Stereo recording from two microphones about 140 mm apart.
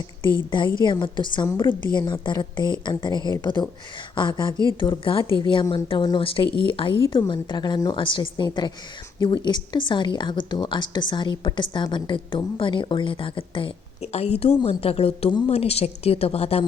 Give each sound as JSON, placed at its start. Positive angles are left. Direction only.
{"t": 0.3, "sound": "speech", "side_deg": 35}
{"t": 1.5, "sound": "a woman's voice", "side_deg": 20}
{"t": 1.8, "sound": "a woman's voice", "side_deg": 30}